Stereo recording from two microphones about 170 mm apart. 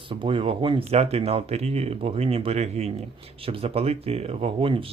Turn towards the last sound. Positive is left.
turn(degrees=-30)  # may be behind; listen again after turning